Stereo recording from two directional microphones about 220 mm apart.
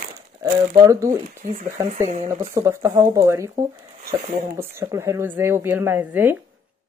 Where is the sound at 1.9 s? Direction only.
30° right (ahead or behind).